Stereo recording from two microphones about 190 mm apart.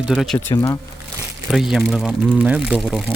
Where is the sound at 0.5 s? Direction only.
20° left (ahead or behind).